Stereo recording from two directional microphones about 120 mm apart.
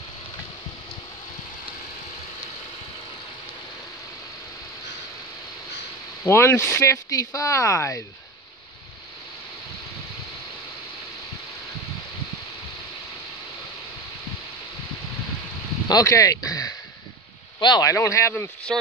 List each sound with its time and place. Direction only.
6.2 s speech: 20° left (ahead or behind)
15.9 s speech: 25° left (ahead or behind)
17.9 s speech: 25° left (ahead or behind)
18.7 s speech: centre (ahead or behind)